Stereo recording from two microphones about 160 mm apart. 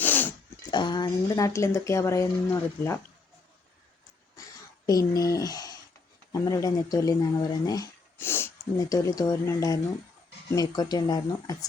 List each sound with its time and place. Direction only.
0.0 s a sound: 10° left (ahead or behind)
0.7 s speech: 30° left (ahead or behind)
4.9 s speech: 25° left (ahead or behind)